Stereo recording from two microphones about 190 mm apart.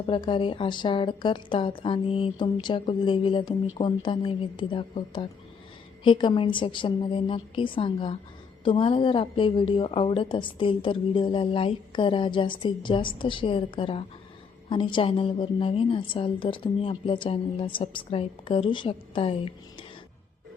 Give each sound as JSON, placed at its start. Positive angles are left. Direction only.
{"t": 0.0, "sound": "a woman's voice", "side_deg": 25}